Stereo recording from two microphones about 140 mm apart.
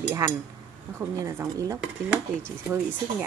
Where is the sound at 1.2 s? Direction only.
25° right (ahead or behind).